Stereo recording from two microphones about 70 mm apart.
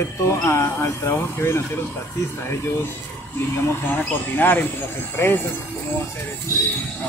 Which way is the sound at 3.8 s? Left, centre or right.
Left.